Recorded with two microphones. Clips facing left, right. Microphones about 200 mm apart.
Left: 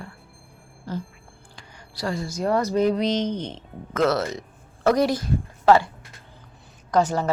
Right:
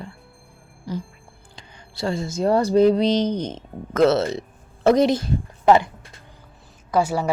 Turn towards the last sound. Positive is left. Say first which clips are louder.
# even
turn(degrees=-10)  # may be behind; listen again after turning